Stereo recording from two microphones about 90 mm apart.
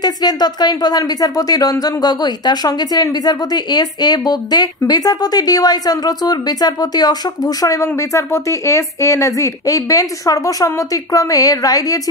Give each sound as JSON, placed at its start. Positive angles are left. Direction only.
{"t": 0.0, "sound": "speech", "side_deg": 50}